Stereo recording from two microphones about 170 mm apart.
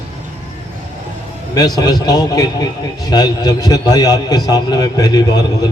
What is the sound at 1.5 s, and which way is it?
A man's voice, 20° left (ahead or behind).